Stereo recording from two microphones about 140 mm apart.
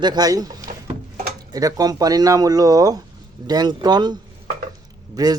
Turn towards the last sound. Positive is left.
turn(degrees=-25)  # may be behind; listen again after turning